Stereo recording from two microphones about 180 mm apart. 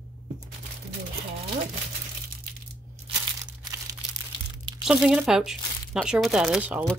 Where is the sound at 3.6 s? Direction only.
20° right (ahead or behind).